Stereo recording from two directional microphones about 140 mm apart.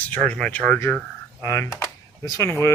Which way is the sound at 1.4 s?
20° left (ahead or behind).